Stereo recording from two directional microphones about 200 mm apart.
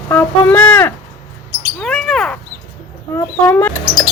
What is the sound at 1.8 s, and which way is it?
Bird, 5° left (ahead or behind).